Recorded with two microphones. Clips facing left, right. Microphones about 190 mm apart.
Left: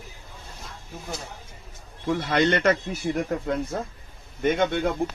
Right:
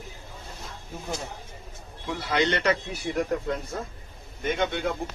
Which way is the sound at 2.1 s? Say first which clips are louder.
Left 4 dB; 50° left (ahead or behind).